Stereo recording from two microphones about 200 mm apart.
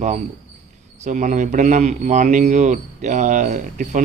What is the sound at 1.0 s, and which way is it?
Speech, 40° right (ahead or behind).